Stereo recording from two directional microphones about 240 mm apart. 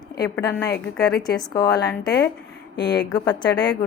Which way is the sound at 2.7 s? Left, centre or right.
Left.